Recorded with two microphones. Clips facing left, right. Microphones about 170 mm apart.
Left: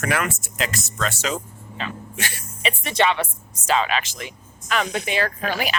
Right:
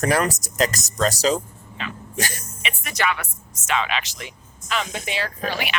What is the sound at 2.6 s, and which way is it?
Speech, 30° left (ahead or behind).